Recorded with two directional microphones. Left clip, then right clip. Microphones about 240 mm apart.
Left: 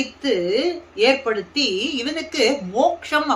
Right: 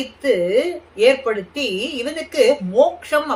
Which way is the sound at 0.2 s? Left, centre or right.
Centre.